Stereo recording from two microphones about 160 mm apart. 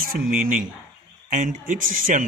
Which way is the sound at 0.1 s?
60° right (ahead or behind).